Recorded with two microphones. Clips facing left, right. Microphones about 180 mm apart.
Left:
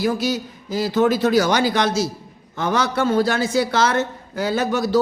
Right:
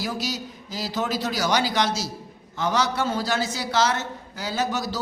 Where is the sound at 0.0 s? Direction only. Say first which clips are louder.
Left 8 dB; 55° left (ahead or behind).